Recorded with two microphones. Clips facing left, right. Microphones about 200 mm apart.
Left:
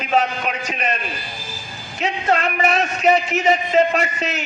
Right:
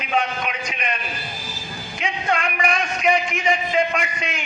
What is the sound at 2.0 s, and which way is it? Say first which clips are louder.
A man's voice: left 4 dB; 35° left (ahead or behind).